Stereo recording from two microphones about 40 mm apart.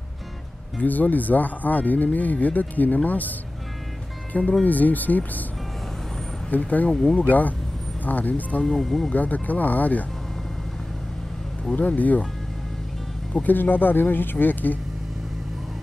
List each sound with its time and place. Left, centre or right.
0.7 s speech: left
6.5 s speech: left
6.9 s speech: centre
7.2 s speech: left
8.6 s speech: centre
9.1 s speech: left
11.7 s speech: left
13.4 s speech: left